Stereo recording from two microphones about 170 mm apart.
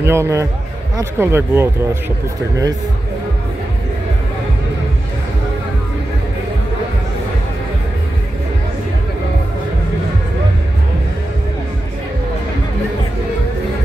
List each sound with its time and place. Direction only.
0.0 s speech: 15° right (ahead or behind)